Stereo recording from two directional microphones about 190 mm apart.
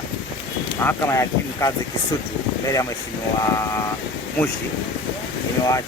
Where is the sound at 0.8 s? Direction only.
15° left (ahead or behind).